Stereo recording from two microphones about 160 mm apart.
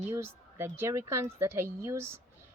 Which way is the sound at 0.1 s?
15° right (ahead or behind).